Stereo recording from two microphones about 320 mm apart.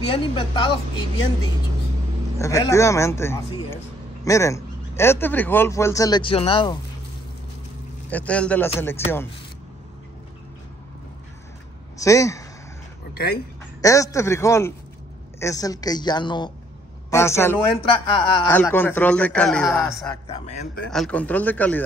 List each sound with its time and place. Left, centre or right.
0.0 s speech: centre
2.3 s speech: centre
8.1 s a man's voice: centre
12.0 s speech: centre
13.1 s speech: left
13.7 s a man's voice: centre
20.2 s speech: centre
20.9 s a man's voice: centre